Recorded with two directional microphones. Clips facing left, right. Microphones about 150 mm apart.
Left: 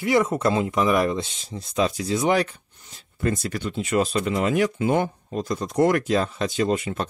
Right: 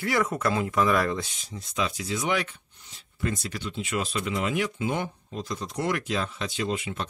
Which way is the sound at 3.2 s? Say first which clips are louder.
Left 6 dB; 45° left (ahead or behind).